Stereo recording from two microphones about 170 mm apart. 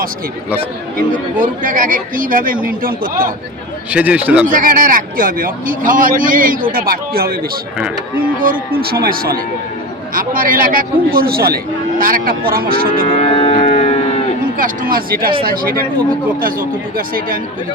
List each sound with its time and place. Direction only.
0.9 s speech: 50° right (ahead or behind)
3.9 s speech: 10° right (ahead or behind)
4.4 s a man's voice: 55° right (ahead or behind)
8.9 s a man's voice: 65° right (ahead or behind)
13.1 s music: 40° left (ahead or behind)
14.6 s a man's voice: 55° right (ahead or behind)